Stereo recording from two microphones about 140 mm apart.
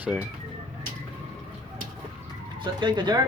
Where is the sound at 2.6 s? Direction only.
35° right (ahead or behind).